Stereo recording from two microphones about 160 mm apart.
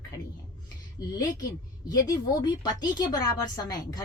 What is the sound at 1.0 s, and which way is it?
A woman's voice, 25° left (ahead or behind).